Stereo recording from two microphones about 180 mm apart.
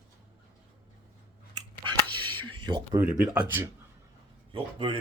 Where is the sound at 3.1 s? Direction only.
10° right (ahead or behind).